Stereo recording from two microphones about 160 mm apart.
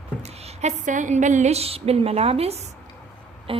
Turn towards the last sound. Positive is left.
turn(degrees=-35)  # may be behind; listen again after turning